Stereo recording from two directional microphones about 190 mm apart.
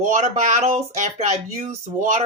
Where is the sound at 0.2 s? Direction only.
40° right (ahead or behind).